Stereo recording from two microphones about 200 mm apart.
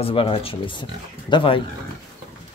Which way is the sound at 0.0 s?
25° left (ahead or behind).